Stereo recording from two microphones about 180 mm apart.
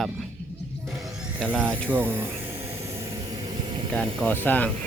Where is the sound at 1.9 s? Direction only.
10° right (ahead or behind).